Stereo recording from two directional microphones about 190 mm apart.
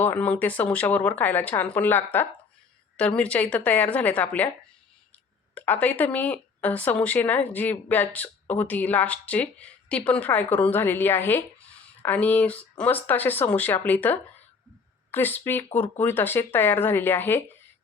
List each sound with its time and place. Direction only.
0.0 s speech: 10° left (ahead or behind)
5.5 s speech: 10° left (ahead or behind)